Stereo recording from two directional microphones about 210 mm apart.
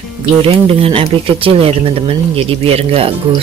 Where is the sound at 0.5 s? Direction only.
30° right (ahead or behind).